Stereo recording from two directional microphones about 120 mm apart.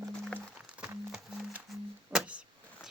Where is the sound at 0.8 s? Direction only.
10° right (ahead or behind).